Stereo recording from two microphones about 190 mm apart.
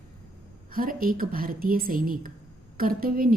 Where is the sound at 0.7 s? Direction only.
50° right (ahead or behind).